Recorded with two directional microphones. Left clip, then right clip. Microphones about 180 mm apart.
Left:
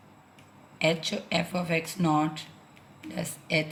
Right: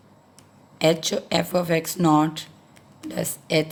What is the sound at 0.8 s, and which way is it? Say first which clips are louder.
Speech: right 6 dB; 55° right (ahead or behind).